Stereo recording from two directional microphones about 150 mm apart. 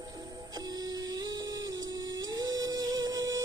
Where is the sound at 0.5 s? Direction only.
25° right (ahead or behind).